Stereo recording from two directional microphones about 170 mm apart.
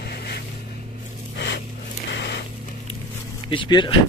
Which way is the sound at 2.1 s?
80° left.